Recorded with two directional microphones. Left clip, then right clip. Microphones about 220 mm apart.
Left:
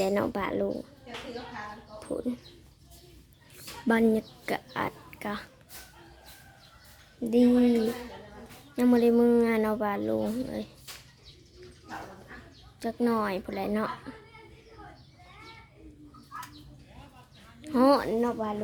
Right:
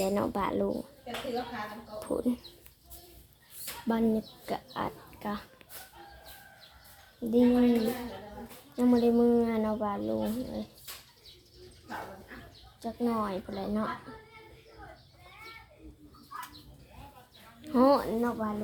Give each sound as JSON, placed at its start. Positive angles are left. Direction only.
{"t": 0.0, "sound": "speech", "side_deg": 15}
{"t": 2.0, "sound": "speech", "side_deg": -5}
{"t": 3.8, "sound": "speech", "side_deg": 30}
{"t": 7.3, "sound": "speech", "side_deg": 20}
{"t": 8.7, "sound": "speech", "side_deg": 20}
{"t": 12.8, "sound": "a woman's voice", "side_deg": 35}
{"t": 17.6, "sound": "speech", "side_deg": 10}